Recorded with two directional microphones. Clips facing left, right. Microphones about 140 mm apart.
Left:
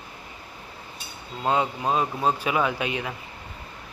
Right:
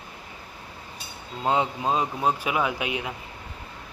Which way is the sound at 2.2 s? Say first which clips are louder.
Left 1 dB; 5° right (ahead or behind).